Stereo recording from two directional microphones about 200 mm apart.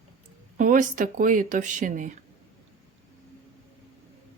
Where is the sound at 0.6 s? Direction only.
40° right (ahead or behind).